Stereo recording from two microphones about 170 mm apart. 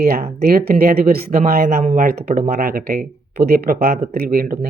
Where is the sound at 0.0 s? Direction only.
60° right (ahead or behind).